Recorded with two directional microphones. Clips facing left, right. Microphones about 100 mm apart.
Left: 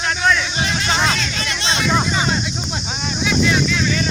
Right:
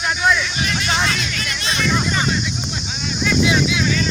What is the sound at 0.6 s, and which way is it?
Speech, 30° left (ahead or behind).